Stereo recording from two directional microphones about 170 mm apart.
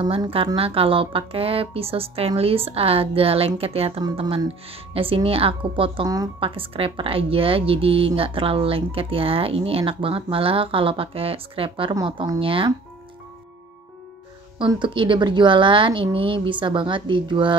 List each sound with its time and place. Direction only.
0.0 s a woman's voice: 30° right (ahead or behind)
14.6 s a woman's voice: 30° right (ahead or behind)